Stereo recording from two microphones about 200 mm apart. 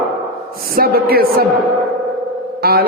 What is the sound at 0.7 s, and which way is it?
Speech, 50° right (ahead or behind).